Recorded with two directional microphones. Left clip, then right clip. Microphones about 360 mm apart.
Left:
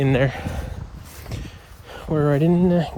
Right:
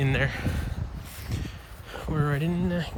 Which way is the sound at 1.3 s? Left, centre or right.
Centre.